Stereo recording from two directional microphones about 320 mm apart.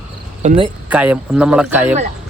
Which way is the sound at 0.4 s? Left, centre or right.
Right.